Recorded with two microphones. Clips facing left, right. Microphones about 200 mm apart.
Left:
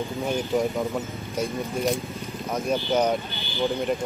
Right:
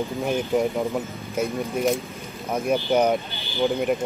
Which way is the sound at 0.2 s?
15° right (ahead or behind).